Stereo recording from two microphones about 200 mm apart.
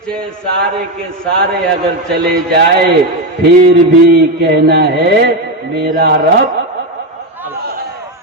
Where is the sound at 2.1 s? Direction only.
55° right (ahead or behind).